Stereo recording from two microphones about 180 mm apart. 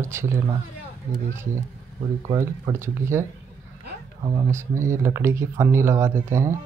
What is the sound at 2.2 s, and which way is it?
Speech, 25° right (ahead or behind).